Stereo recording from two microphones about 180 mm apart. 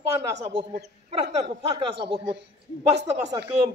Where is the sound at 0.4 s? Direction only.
40° right (ahead or behind).